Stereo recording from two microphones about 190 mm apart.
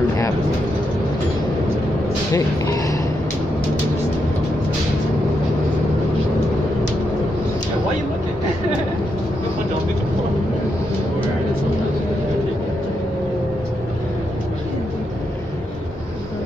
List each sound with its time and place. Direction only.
2.3 s speech: 15° left (ahead or behind)